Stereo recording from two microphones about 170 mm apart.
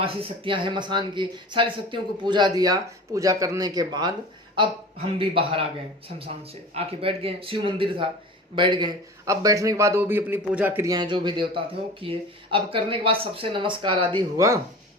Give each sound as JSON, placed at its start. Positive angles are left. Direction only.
{"t": 0.0, "sound": "a man's voice", "side_deg": -35}
{"t": 14.3, "sound": "chopping", "side_deg": -15}